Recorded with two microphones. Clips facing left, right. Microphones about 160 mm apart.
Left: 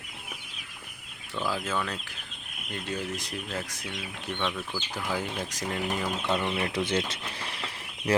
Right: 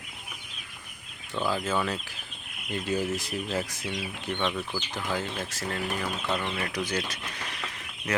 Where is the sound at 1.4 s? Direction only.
Centre (ahead or behind).